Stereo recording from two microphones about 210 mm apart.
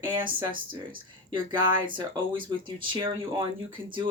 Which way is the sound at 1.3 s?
20° right (ahead or behind).